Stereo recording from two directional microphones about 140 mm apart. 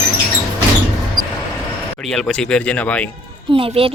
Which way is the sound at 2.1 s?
5° left (ahead or behind).